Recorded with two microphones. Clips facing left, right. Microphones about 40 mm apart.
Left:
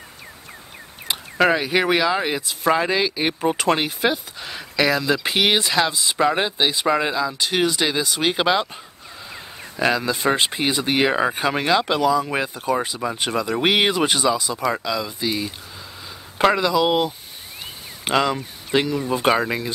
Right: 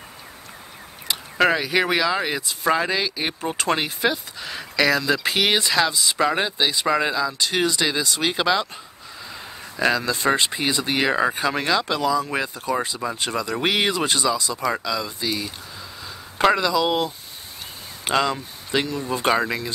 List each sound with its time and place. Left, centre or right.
1.1 s a sound: left
1.6 s speech: centre
9.8 s speech: centre
13.0 s speech: centre
13.5 s speech: left
15.0 s speech: centre
16.6 s speech: left
18.0 s speech: centre